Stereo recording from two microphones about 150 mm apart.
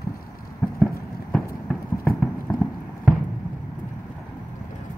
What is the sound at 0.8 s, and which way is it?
Clip-clop, centre (ahead or behind).